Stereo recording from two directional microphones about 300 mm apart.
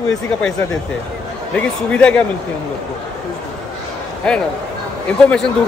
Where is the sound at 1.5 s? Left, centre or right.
Centre.